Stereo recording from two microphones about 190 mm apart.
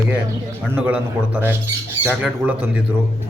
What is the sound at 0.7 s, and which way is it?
A man's voice, 10° right (ahead or behind).